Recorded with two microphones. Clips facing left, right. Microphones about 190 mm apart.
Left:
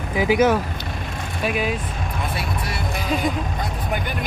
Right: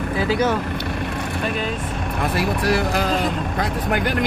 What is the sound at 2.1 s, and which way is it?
Speech, 70° right (ahead or behind).